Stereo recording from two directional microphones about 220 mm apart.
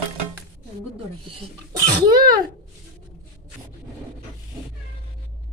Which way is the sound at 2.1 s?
15° right (ahead or behind).